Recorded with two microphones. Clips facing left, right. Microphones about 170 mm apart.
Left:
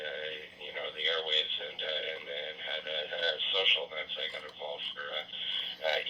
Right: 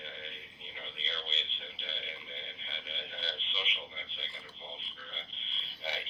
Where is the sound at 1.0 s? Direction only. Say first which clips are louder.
Left 9 dB; 65° left (ahead or behind).